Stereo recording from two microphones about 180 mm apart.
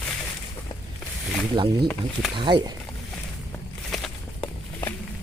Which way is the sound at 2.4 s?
25° right (ahead or behind).